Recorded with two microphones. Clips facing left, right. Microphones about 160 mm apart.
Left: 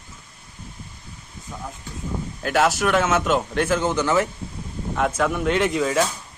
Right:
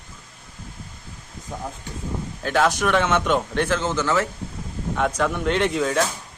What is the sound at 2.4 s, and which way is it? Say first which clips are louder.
A man's voice: left 1 dB; 5° left (ahead or behind).